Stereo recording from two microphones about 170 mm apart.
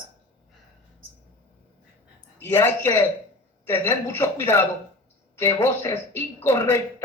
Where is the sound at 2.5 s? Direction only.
15° left (ahead or behind).